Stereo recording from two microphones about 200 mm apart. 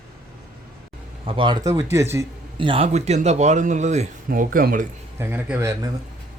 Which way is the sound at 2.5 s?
25° right (ahead or behind).